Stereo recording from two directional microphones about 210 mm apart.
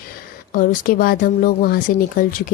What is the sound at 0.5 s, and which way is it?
Speech, 40° left (ahead or behind).